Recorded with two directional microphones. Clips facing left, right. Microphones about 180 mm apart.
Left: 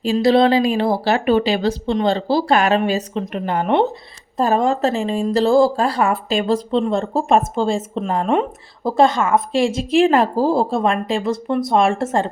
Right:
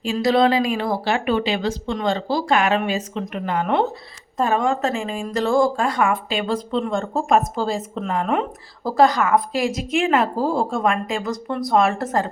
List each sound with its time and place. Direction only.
0.0 s speech: 30° left (ahead or behind)
6.7 s speech: 30° left (ahead or behind)